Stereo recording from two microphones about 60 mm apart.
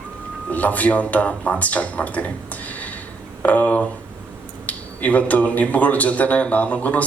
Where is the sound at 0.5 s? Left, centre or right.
Left.